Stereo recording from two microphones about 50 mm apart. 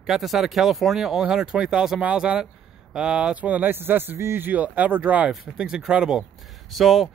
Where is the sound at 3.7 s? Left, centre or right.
Right.